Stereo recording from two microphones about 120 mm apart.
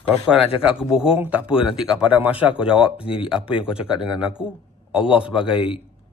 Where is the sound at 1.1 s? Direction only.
10° right (ahead or behind).